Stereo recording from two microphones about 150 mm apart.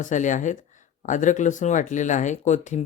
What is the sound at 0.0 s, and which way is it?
Speech, 55° left (ahead or behind).